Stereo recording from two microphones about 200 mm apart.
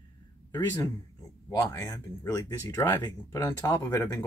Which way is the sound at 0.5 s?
20° left (ahead or behind).